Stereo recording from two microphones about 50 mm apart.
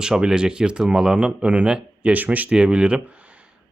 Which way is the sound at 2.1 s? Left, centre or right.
Right.